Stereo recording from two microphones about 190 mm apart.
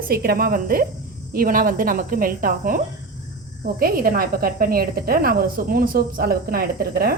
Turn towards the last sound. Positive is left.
turn(degrees=-50)  # may be behind; listen again after turning